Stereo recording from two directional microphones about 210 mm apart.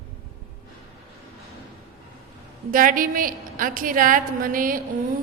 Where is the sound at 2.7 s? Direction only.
40° right (ahead or behind).